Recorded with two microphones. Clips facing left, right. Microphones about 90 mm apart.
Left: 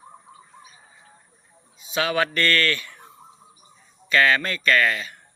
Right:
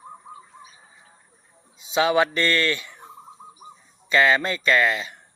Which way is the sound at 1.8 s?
20° right (ahead or behind).